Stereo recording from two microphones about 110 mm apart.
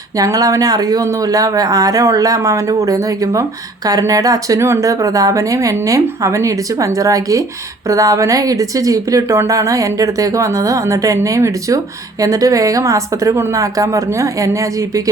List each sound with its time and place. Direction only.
0.2 s a woman's voice: 35° right (ahead or behind)